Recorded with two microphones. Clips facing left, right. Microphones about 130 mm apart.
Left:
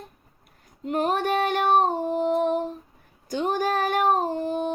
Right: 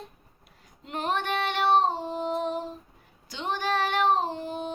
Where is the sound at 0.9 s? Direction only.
45° left (ahead or behind).